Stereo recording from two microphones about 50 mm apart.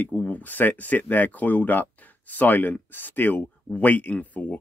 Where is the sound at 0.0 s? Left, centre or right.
Left.